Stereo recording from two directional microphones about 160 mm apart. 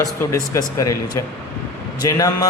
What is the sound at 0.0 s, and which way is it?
Speech, 15° left (ahead or behind).